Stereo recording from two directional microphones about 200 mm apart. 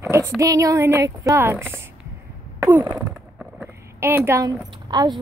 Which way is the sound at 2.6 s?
10° right (ahead or behind).